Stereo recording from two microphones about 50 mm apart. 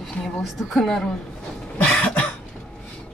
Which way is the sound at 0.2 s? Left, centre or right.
Centre.